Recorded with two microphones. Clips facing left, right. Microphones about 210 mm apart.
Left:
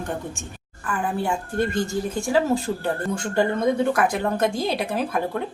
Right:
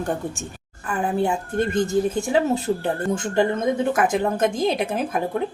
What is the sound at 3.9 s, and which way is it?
Speech, 20° right (ahead or behind).